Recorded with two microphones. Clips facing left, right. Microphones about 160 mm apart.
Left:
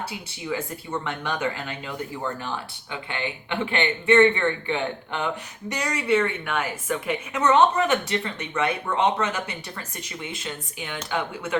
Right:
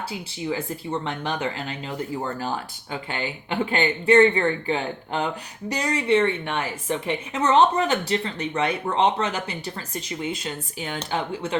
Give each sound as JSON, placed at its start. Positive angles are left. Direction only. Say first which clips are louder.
{"t": 1.0, "sound": "speech", "louder": "even", "side_deg": -30}